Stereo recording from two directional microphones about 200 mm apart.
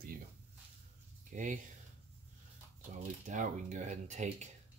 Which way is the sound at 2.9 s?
40° right (ahead or behind).